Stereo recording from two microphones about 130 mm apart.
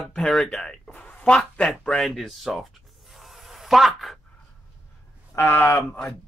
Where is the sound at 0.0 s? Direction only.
5° left (ahead or behind).